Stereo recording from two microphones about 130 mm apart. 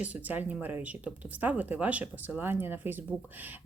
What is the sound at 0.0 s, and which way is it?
Speech, 10° right (ahead or behind).